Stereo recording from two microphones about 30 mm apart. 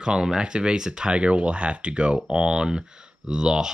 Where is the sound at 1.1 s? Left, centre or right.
Right.